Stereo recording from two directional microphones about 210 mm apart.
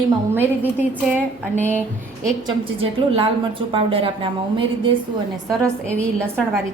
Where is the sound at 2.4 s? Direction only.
25° right (ahead or behind).